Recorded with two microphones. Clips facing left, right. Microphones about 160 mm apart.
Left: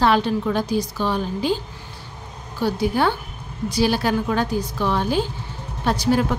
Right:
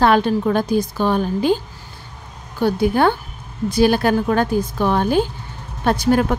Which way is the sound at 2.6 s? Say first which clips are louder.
Right 4 dB; 55° right (ahead or behind).